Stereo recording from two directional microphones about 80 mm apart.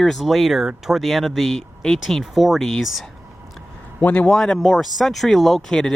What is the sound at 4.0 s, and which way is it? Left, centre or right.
Speech, centre.